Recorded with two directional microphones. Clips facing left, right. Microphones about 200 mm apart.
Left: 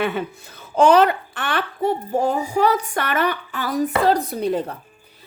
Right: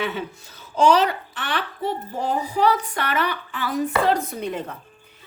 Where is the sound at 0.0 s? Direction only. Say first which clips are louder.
Left 4 dB; 55° left (ahead or behind).